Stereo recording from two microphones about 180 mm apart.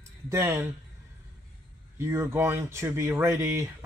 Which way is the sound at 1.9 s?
15° right (ahead or behind).